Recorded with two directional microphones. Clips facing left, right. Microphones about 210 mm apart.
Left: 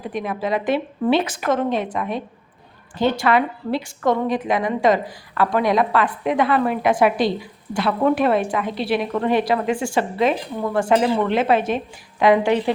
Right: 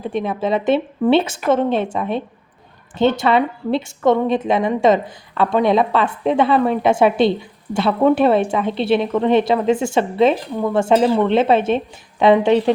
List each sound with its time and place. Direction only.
0.0 s a woman's voice: 25° right (ahead or behind)